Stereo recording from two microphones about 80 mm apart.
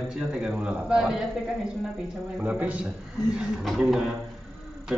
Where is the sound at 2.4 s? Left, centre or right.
Centre.